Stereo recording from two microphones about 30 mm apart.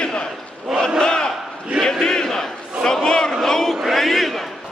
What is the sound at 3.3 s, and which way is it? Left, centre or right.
Crowd, centre.